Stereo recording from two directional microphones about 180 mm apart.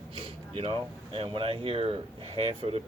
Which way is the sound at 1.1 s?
30° right (ahead or behind).